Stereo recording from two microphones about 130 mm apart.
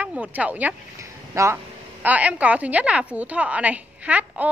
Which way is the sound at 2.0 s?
10° right (ahead or behind).